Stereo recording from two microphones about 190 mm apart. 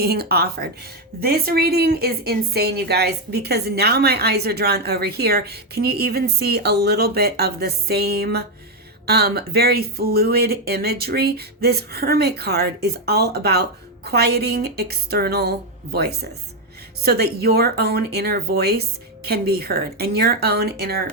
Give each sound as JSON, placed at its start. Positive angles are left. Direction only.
{"t": 0.0, "sound": "a woman's voice", "side_deg": -55}